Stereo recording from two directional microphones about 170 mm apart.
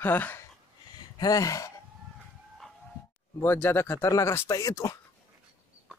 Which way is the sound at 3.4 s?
15° left (ahead or behind).